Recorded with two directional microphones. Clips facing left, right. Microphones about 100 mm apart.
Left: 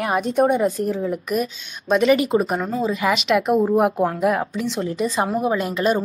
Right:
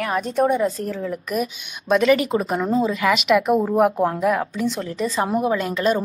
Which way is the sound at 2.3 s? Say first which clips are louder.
Left 3 dB; 25° left (ahead or behind).